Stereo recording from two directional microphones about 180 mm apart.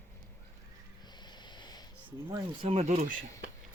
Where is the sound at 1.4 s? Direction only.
25° left (ahead or behind).